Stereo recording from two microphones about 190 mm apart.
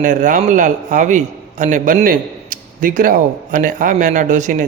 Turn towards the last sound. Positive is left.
turn(degrees=-40)  # may be behind; listen again after turning